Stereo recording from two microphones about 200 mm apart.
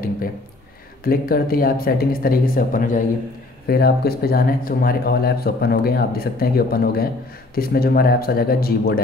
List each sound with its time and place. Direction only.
1.0 s speech: 45° left (ahead or behind)